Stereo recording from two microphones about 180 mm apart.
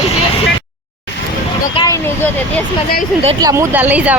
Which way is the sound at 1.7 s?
25° left (ahead or behind).